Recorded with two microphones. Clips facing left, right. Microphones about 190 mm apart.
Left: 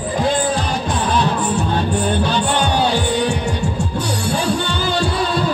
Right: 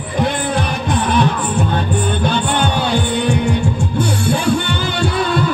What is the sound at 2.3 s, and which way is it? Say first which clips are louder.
Music: right 1 dB; 55° right (ahead or behind).